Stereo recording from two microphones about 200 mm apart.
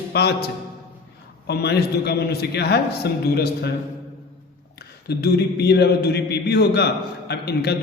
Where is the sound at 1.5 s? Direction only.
55° left (ahead or behind).